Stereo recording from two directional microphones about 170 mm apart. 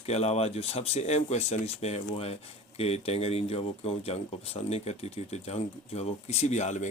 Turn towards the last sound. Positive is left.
turn(degrees=45)  # may be behind; listen again after turning